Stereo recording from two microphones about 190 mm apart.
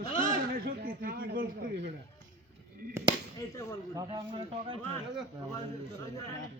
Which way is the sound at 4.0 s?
25° right (ahead or behind).